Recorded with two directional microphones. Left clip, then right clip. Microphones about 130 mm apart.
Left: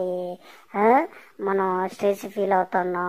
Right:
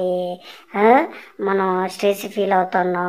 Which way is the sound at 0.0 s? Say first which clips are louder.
Right 6 dB; 50° left (ahead or behind).